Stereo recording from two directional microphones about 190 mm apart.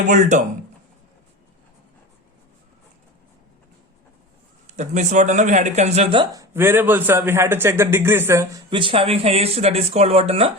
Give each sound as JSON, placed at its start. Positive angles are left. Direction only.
{"t": 0.1, "sound": "speech", "side_deg": -40}
{"t": 4.6, "sound": "speech", "side_deg": -40}
{"t": 8.7, "sound": "speech", "side_deg": -25}